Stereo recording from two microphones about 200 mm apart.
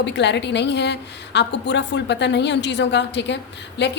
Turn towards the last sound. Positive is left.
turn(degrees=60)  # may be behind; listen again after turning